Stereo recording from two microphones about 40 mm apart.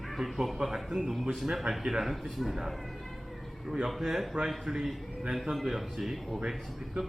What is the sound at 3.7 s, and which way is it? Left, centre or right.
Speech, centre.